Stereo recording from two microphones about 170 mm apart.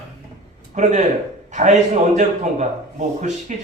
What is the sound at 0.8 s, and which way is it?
Speech, 45° right (ahead or behind).